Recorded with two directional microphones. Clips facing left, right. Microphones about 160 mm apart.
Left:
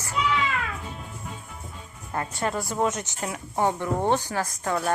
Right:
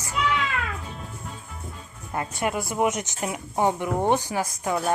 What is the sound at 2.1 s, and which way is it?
Speech, 15° right (ahead or behind).